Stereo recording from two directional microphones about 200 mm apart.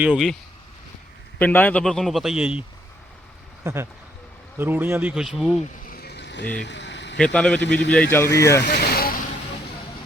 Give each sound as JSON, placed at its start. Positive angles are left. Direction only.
{"t": 0.0, "sound": "a man's voice", "side_deg": 0}
{"t": 1.4, "sound": "a man's voice", "side_deg": 10}
{"t": 5.8, "sound": "a sound", "side_deg": 50}
{"t": 6.7, "sound": "vehicle", "side_deg": 60}
{"t": 7.3, "sound": "a man's voice", "side_deg": 5}
{"t": 8.6, "sound": "vehicle", "side_deg": 50}